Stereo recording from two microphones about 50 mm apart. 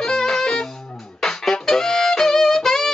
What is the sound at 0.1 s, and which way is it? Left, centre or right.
Saxophone, centre.